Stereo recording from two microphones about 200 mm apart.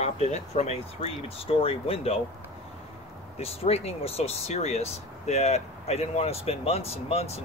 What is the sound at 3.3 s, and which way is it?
Speech, 30° left (ahead or behind).